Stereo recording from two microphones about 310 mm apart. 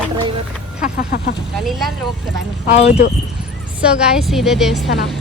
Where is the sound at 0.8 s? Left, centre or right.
Left.